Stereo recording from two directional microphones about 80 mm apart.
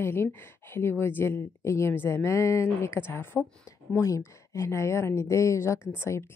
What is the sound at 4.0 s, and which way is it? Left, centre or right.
A woman's voice, left.